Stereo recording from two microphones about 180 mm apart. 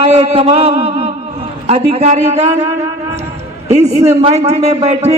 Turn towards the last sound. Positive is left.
turn(degrees=-35)  # may be behind; listen again after turning